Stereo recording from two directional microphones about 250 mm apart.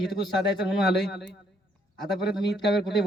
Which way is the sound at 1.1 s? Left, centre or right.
Left.